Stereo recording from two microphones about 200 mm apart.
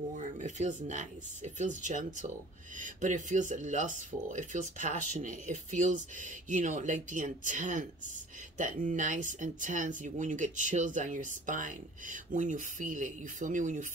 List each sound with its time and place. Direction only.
0.1 s speech: 40° right (ahead or behind)